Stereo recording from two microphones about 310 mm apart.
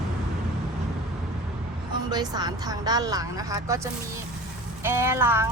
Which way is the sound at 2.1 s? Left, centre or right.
Centre.